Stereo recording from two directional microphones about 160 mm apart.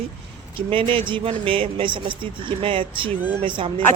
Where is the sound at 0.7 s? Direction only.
35° right (ahead or behind).